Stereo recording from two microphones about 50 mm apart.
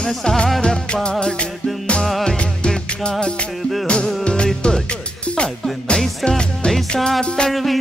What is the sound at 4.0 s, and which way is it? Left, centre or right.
Music, centre.